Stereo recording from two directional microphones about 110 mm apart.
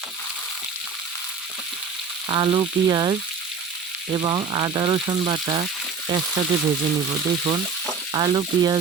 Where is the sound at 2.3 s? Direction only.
50° right (ahead or behind).